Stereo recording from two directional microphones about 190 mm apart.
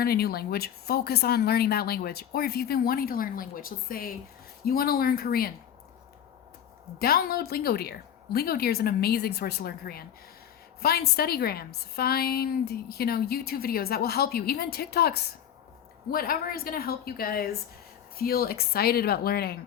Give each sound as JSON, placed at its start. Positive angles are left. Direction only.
{"t": 0.0, "sound": "a woman's voice", "side_deg": 55}
{"t": 7.0, "sound": "a woman's voice", "side_deg": 55}